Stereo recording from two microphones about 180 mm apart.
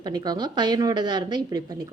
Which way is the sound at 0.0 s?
25° right (ahead or behind).